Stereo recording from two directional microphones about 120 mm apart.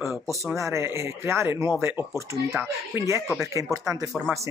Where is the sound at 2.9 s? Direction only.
25° right (ahead or behind).